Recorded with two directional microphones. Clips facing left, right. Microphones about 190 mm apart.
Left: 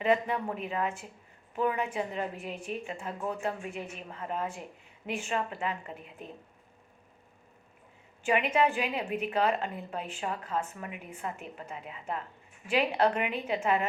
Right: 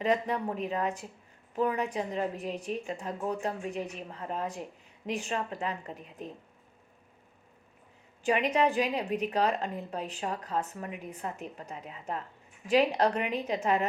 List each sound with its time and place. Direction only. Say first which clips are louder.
0.0 s a woman's voice: left 1 dB; 35° right (ahead or behind)
8.2 s a woman's voice: even; 35° right (ahead or behind)